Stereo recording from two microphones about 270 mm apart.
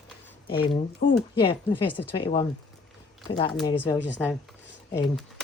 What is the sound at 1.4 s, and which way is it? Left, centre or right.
Speech, centre.